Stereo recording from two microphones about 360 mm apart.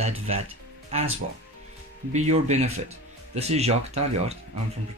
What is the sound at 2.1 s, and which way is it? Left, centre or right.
Speech, centre.